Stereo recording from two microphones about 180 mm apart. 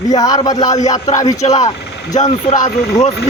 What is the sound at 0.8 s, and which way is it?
Music, 40° left (ahead or behind).